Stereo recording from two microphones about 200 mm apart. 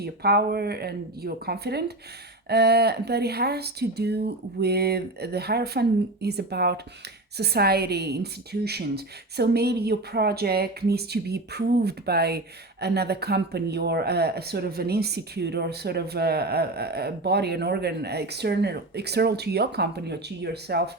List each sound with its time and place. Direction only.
0.0 s speech: 50° right (ahead or behind)